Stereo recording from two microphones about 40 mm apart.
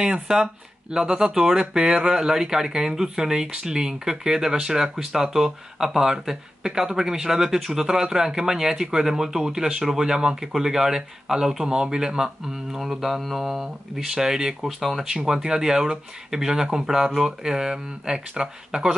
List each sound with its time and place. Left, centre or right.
0.0 s speech: centre